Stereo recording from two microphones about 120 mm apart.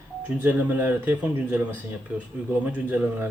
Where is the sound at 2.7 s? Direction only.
15° right (ahead or behind).